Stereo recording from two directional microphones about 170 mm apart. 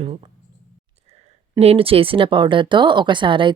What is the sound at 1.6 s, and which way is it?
Speech, 35° right (ahead or behind).